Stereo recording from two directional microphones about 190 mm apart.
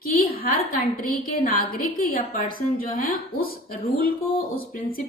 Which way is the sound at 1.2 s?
45° left (ahead or behind).